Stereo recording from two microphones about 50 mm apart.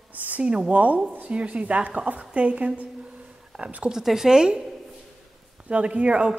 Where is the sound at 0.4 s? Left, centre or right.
Right.